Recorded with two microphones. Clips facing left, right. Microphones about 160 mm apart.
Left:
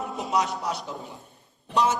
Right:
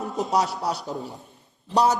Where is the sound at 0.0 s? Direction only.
40° right (ahead or behind).